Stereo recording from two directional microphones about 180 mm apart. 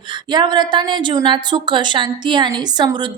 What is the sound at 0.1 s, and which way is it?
A woman's voice, 25° right (ahead or behind).